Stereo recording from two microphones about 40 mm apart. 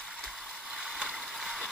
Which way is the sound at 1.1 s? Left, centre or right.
Centre.